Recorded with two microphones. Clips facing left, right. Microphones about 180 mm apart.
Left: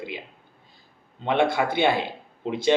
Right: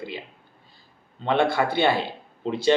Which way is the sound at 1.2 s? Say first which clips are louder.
Even; 15° left (ahead or behind).